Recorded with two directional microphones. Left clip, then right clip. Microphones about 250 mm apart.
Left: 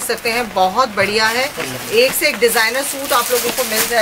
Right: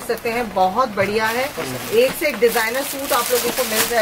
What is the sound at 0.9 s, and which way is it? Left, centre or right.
Speech, centre.